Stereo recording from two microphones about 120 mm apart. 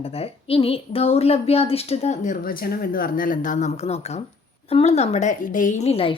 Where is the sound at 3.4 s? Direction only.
85° left.